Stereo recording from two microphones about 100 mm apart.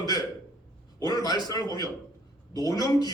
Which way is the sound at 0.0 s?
40° left (ahead or behind).